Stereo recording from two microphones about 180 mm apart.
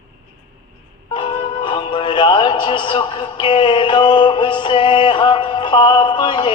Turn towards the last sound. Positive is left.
turn(degrees=25)  # may be behind; listen again after turning